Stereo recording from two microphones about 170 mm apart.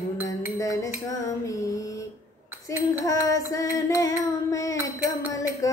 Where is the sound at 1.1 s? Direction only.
20° left (ahead or behind).